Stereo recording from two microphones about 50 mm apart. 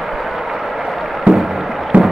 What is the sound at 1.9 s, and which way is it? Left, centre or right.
Music, right.